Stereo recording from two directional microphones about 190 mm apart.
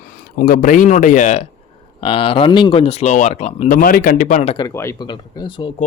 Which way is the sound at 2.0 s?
30° left (ahead or behind).